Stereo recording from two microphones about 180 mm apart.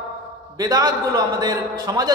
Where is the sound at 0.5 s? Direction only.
20° right (ahead or behind).